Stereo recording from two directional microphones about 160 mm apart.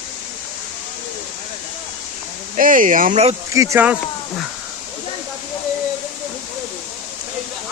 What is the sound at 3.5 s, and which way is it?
Speech, 20° right (ahead or behind).